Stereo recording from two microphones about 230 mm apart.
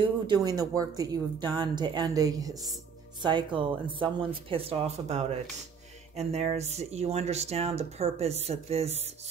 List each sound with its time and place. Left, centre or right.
0.0 s speech: centre